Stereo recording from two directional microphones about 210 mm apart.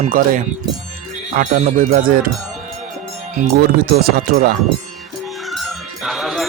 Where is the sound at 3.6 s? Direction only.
45° right (ahead or behind).